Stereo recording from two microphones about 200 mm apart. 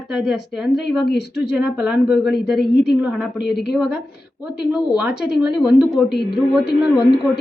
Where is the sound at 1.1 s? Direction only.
55° left (ahead or behind).